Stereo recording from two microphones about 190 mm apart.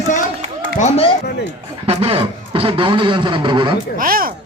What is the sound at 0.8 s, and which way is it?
Speech, 35° left (ahead or behind).